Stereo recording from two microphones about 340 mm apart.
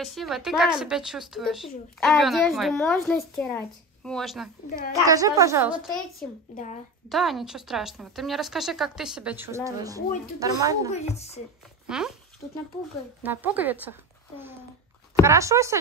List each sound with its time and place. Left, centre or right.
0.0 s a woman's voice: centre
6.5 s speech: left
7.1 s a woman's voice: centre
10.9 s speech: centre
11.9 s speech: centre
13.2 s speech: centre
15.2 s a woman's voice: centre